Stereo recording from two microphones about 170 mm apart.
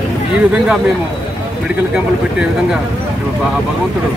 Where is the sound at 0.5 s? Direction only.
5° right (ahead or behind).